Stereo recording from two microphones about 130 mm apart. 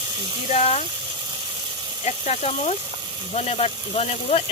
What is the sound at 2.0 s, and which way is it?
Speech, 60° left (ahead or behind).